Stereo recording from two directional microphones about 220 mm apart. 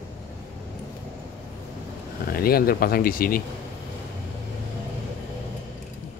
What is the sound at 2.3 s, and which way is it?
Speech, 45° left (ahead or behind).